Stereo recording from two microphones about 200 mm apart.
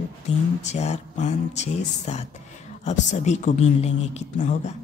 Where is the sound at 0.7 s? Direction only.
35° left (ahead or behind).